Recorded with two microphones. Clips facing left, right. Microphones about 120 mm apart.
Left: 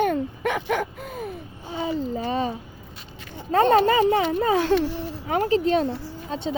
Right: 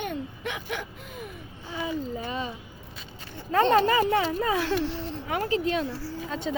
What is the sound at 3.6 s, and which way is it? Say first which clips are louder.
A child's voice: left 3 dB; 30° left (ahead or behind).